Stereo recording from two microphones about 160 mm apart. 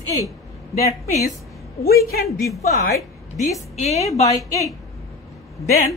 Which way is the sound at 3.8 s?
45° left (ahead or behind).